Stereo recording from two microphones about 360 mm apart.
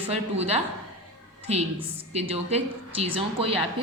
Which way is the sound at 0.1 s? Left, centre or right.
Centre.